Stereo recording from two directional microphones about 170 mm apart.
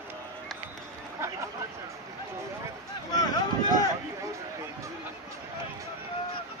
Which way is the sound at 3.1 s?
25° left (ahead or behind).